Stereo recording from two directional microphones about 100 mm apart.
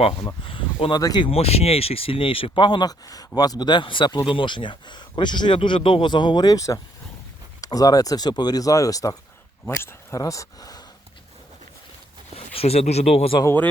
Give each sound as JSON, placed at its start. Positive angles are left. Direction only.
{"t": 0.4, "sound": "speech", "side_deg": 60}
{"t": 0.9, "sound": "speech", "side_deg": 45}
{"t": 1.3, "sound": "speech", "side_deg": 90}
{"t": 5.5, "sound": "speech", "side_deg": 60}
{"t": 12.5, "sound": "speech", "side_deg": 90}
{"t": 13.4, "sound": "speech", "side_deg": 20}